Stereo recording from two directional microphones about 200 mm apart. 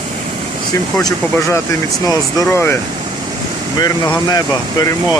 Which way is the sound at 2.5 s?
10° left (ahead or behind).